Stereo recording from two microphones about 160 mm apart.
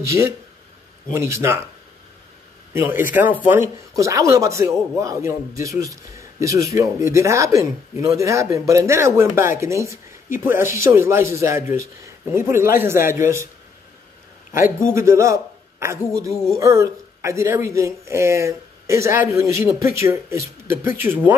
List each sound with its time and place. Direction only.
0.0 s speech: 20° right (ahead or behind)
2.7 s speech: 15° right (ahead or behind)
15.0 s a man's voice: 20° right (ahead or behind)